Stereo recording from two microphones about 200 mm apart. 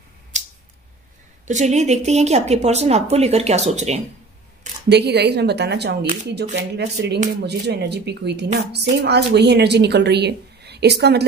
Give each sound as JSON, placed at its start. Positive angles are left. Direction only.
{"t": 1.5, "sound": "speech", "side_deg": -35}
{"t": 4.8, "sound": "a woman's voice", "side_deg": -55}